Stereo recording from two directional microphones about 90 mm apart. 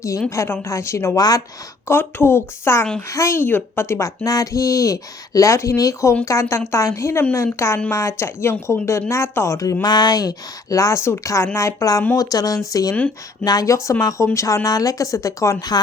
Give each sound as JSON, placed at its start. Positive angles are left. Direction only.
{"t": 0.3, "sound": "speech", "side_deg": 30}
{"t": 9.8, "sound": "speech", "side_deg": 50}